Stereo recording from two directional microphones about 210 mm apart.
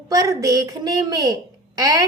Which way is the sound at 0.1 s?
15° right (ahead or behind).